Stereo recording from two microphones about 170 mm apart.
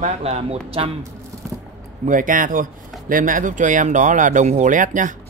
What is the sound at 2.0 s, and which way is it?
Speech, 50° right (ahead or behind).